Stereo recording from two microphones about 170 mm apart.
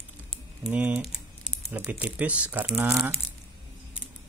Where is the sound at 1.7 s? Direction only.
10° right (ahead or behind).